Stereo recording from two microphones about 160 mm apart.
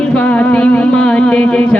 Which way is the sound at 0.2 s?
10° left (ahead or behind).